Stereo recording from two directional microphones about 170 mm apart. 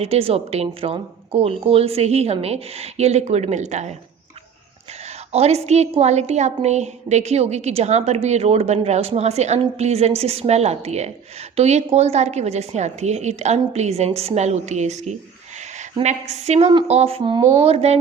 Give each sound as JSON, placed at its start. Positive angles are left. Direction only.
{"t": 0.0, "sound": "a woman's voice", "side_deg": -35}
{"t": 5.0, "sound": "a woman's voice", "side_deg": -40}